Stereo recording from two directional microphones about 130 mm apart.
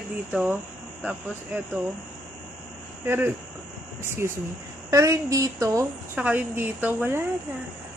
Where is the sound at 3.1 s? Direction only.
15° right (ahead or behind).